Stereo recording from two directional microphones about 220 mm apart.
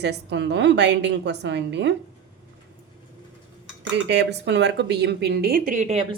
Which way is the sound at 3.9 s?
50° right (ahead or behind).